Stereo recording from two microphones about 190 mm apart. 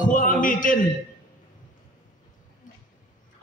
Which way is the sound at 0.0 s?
45° left (ahead or behind).